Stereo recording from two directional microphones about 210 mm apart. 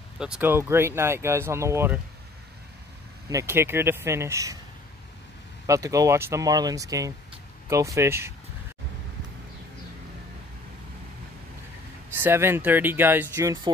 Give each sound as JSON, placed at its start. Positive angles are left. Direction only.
{"t": 0.2, "sound": "speech", "side_deg": -5}
{"t": 3.3, "sound": "speech", "side_deg": -15}
{"t": 5.7, "sound": "speech", "side_deg": -15}
{"t": 12.2, "sound": "speech", "side_deg": -10}